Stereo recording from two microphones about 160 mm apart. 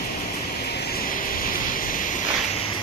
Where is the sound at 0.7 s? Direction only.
65° left (ahead or behind).